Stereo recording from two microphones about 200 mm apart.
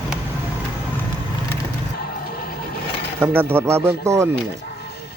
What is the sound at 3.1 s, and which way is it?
Speech, 10° right (ahead or behind).